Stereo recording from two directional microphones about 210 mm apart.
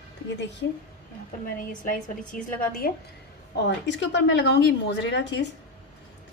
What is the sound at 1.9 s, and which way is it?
A woman's voice, 40° left (ahead or behind).